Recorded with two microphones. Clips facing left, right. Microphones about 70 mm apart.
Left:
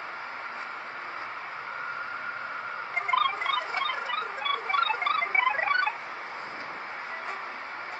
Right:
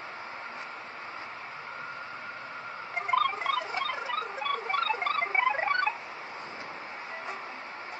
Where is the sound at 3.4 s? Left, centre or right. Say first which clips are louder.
Left 1 dB; left.